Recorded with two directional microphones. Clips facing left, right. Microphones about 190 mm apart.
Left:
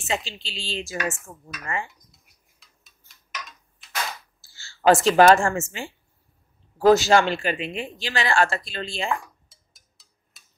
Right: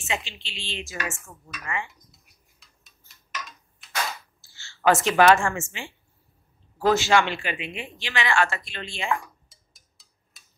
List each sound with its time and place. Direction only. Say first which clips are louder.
0.0 s speech: left 3 dB; 35° left (ahead or behind)
2.6 s a sound: left 1 dB; centre (ahead or behind)
3.8 s cap gun: even; centre (ahead or behind)
4.4 s speech: left 2 dB; 35° left (ahead or behind)
9.5 s music: even; centre (ahead or behind)